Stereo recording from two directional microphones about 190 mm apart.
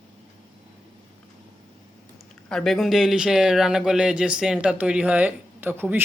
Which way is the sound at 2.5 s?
Centre (ahead or behind).